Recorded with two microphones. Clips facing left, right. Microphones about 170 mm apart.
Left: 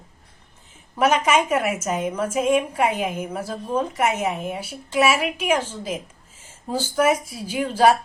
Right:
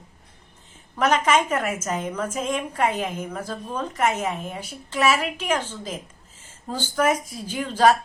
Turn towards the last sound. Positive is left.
turn(degrees=10)  # may be behind; listen again after turning